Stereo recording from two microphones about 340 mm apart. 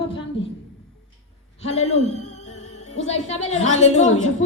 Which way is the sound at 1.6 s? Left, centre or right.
Centre.